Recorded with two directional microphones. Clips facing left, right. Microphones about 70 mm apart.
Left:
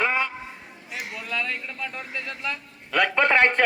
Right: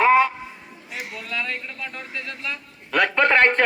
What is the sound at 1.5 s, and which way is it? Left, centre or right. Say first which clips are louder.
Speech: even; centre.